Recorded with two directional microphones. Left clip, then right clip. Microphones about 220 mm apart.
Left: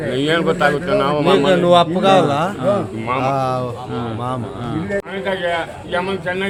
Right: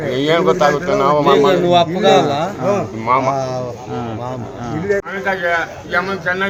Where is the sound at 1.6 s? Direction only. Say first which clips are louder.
Left 1 dB; 45° left (ahead or behind).